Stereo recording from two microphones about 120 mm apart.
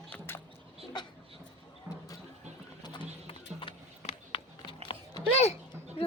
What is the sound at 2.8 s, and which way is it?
Music, 40° left (ahead or behind).